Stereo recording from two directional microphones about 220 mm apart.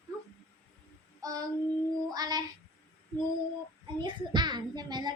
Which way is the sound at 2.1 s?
15° right (ahead or behind).